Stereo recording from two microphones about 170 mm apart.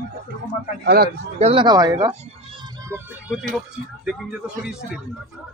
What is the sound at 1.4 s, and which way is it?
Speech, 30° right (ahead or behind).